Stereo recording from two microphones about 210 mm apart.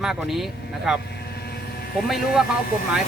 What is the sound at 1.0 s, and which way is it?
Vehicle, 50° left (ahead or behind).